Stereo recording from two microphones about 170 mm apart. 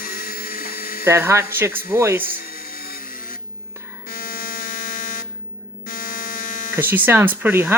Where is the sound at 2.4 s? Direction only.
60° left (ahead or behind).